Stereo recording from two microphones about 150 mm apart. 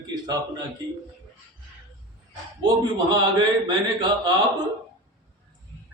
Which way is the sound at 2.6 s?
30° right (ahead or behind).